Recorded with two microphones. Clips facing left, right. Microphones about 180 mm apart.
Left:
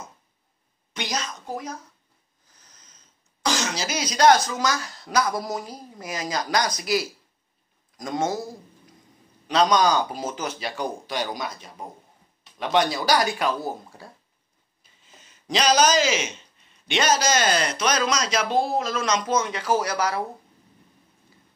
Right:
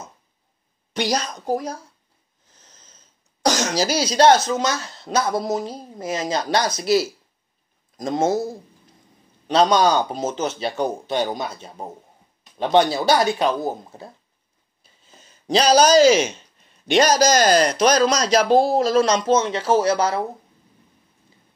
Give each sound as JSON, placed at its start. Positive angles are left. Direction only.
{"t": 0.9, "sound": "speech", "side_deg": -35}
{"t": 2.7, "sound": "sniff", "side_deg": -25}
{"t": 3.4, "sound": "speech", "side_deg": -45}
{"t": 15.2, "sound": "a man's voice", "side_deg": -30}